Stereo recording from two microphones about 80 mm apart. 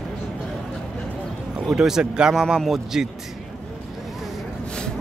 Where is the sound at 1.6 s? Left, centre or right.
Centre.